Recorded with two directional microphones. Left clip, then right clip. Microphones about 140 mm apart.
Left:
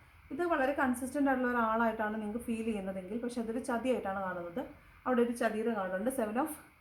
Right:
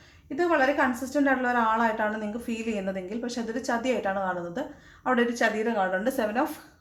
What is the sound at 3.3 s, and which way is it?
Speech, 15° left (ahead or behind).